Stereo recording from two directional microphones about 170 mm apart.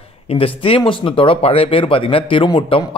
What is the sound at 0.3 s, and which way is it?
Speech, 30° left (ahead or behind).